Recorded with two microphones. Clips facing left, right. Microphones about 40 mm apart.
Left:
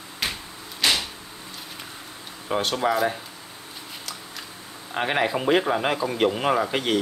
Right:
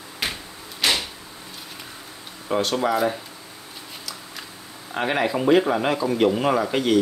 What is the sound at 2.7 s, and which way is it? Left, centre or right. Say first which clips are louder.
Speech: even; centre.